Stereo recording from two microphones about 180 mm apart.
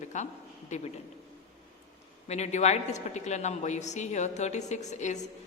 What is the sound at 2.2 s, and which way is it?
A woman's voice, 40° left (ahead or behind).